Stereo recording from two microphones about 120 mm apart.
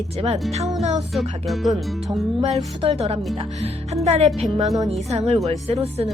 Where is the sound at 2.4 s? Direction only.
60° right (ahead or behind).